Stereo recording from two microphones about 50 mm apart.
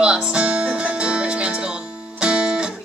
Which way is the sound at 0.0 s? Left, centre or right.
Centre.